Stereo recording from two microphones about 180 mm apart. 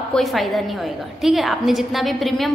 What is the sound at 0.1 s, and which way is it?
A woman's voice, centre (ahead or behind).